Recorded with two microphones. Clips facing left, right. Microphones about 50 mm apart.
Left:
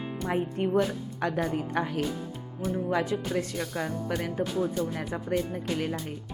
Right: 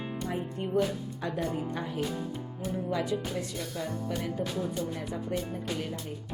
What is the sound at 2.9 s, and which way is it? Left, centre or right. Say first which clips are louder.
Speech: left 3 dB; left.